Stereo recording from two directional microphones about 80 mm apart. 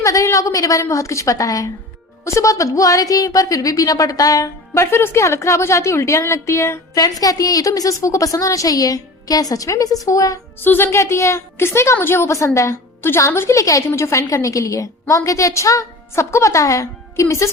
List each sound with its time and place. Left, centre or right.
0.0 s a woman's voice: left
6.9 s a woman's voice: left
10.6 s a woman's voice: left